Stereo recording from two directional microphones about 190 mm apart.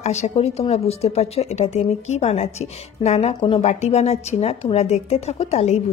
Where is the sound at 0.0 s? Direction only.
35° left (ahead or behind).